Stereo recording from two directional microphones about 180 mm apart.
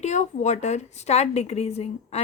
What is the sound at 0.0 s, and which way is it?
A woman's voice, 40° left (ahead or behind).